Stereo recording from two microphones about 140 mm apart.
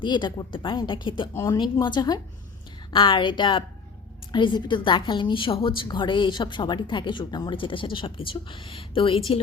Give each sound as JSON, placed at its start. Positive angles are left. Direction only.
{"t": 0.0, "sound": "a woman's voice", "side_deg": 35}
{"t": 1.3, "sound": "speech", "side_deg": 20}
{"t": 1.5, "sound": "a woman's voice", "side_deg": 35}